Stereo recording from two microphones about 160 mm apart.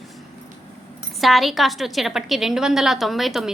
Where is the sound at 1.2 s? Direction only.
Centre (ahead or behind).